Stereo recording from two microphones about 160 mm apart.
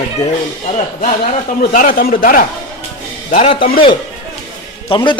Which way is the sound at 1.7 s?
60° left (ahead or behind).